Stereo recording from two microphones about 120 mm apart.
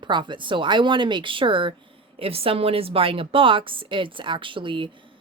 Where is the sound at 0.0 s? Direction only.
40° right (ahead or behind).